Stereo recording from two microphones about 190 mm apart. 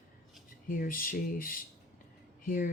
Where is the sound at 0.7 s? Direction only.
45° left (ahead or behind).